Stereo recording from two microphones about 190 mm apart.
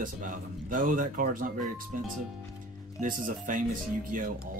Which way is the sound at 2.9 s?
45° right (ahead or behind).